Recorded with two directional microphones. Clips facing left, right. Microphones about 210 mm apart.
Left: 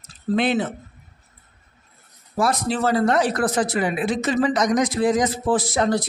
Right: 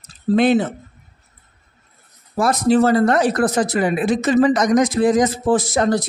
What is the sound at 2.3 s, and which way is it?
Speech, 45° right (ahead or behind).